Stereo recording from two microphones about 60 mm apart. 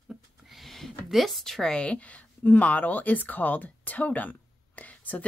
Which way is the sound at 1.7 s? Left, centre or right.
Left.